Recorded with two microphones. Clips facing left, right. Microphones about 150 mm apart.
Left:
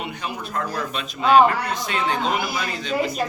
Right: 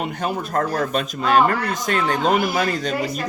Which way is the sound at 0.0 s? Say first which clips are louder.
Right 6 dB; 45° right (ahead or behind).